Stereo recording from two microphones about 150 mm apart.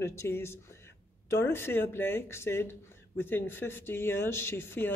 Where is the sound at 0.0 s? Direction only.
15° left (ahead or behind).